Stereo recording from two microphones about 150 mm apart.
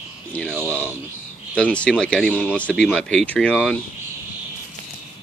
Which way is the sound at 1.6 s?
10° left (ahead or behind).